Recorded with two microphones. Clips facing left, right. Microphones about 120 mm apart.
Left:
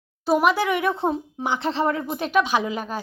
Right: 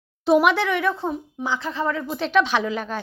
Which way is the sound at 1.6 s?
70° left (ahead or behind).